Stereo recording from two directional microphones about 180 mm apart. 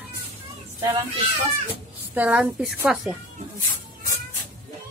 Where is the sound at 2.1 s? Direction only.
10° right (ahead or behind).